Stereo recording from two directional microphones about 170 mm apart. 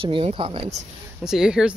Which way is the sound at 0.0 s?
30° right (ahead or behind).